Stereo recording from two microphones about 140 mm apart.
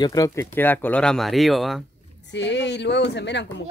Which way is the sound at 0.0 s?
25° left (ahead or behind).